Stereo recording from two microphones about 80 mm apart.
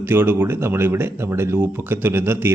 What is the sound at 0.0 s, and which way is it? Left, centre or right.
Speech, right.